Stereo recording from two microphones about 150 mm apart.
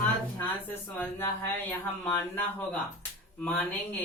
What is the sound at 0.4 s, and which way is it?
Speech, 10° left (ahead or behind).